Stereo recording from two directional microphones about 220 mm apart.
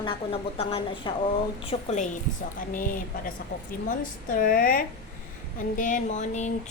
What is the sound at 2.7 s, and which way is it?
Speech, 40° left (ahead or behind).